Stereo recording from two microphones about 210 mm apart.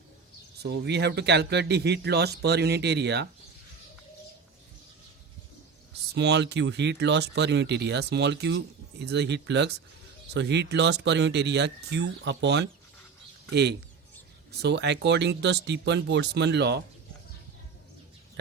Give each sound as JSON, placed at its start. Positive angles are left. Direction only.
{"t": 0.6, "sound": "speech", "side_deg": -50}
{"t": 6.1, "sound": "speech", "side_deg": -55}